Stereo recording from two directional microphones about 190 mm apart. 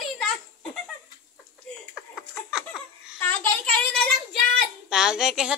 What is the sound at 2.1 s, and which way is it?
Laughter, centre (ahead or behind).